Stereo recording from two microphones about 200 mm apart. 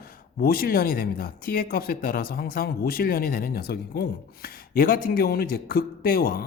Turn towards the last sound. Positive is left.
turn(degrees=50)  # may be behind; listen again after turning